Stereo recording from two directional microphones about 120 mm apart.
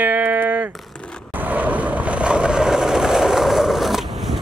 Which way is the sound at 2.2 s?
10° right (ahead or behind).